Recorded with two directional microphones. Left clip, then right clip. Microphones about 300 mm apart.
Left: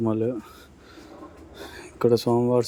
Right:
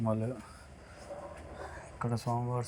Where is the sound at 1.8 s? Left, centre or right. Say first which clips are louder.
Left 19 dB; left.